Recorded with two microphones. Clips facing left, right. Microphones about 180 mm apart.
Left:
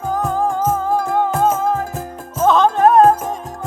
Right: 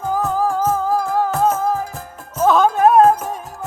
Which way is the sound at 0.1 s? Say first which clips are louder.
Even; 5° right (ahead or behind).